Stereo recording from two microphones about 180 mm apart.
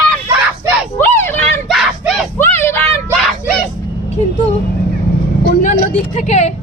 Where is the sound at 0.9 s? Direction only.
10° left (ahead or behind).